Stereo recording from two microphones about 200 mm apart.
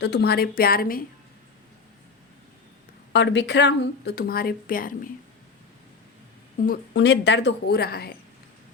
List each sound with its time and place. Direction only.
0.0 s speech: 55° left (ahead or behind)
3.1 s speech: 60° left (ahead or behind); by 4.9 s 45° left (ahead or behind)
6.9 s speech: 60° left (ahead or behind)